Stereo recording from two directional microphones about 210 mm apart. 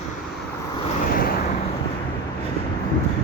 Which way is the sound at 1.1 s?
45° left (ahead or behind).